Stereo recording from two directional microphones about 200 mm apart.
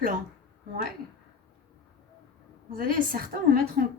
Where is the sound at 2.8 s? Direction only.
45° right (ahead or behind).